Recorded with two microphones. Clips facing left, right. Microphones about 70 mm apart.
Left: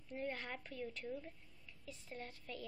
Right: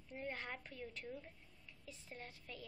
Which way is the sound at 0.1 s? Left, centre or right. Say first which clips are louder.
Left 2 dB; right.